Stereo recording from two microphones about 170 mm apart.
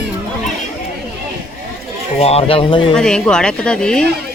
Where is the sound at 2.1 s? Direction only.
35° left (ahead or behind).